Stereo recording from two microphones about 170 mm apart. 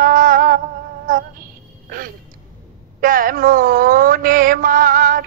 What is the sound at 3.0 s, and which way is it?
Mantra, 55° right (ahead or behind).